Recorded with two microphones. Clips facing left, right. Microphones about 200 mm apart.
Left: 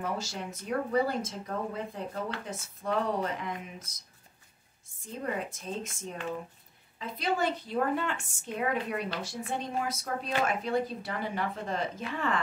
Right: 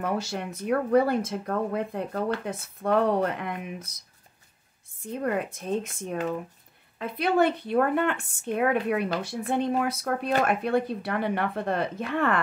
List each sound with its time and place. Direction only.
0.0 s speech: 60° right (ahead or behind)
5.0 s speech: 60° right (ahead or behind)